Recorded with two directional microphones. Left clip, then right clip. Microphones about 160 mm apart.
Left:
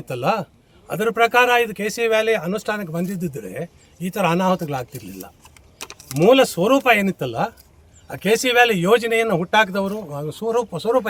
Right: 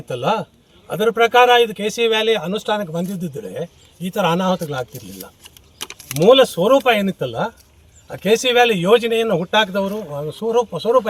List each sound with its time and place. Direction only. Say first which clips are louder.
0.1 s speech: right 2 dB; 20° left (ahead or behind)
5.9 s keys jangling: right 2 dB; 50° left (ahead or behind)
6.2 s speech: right 3 dB; 25° left (ahead or behind)